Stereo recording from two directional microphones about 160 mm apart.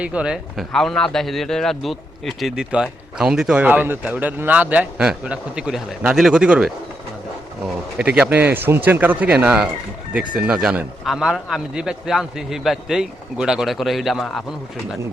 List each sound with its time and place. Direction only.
0.0 s a man's voice: 5° right (ahead or behind)
7.9 s a man's voice: 10° right (ahead or behind)